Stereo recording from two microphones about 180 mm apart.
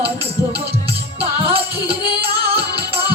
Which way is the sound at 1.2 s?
30° right (ahead or behind).